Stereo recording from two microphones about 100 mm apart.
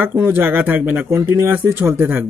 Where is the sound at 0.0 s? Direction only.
20° right (ahead or behind).